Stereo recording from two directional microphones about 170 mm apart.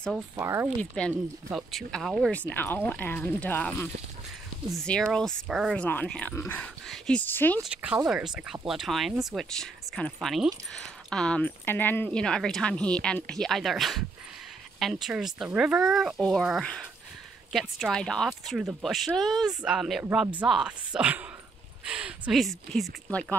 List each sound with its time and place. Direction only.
0.4 s speech: 15° right (ahead or behind)
1.0 s speech: 5° left (ahead or behind)
2.3 s speech: 10° left (ahead or behind)
7.6 s speech: 5° right (ahead or behind)